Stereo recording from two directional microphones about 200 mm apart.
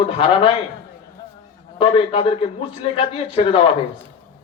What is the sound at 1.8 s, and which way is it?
Speech, 25° left (ahead or behind).